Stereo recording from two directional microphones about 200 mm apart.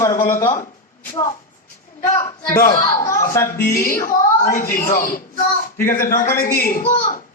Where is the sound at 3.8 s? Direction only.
45° left (ahead or behind).